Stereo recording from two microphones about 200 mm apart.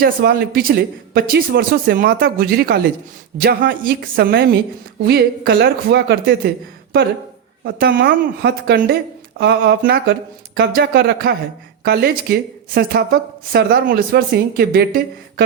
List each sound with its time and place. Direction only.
0.0 s a woman's voice: 50° right (ahead or behind)
7.6 s a woman's voice: 50° right (ahead or behind)